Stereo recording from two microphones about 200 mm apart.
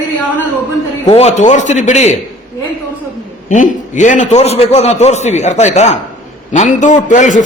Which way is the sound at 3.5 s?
40° left (ahead or behind).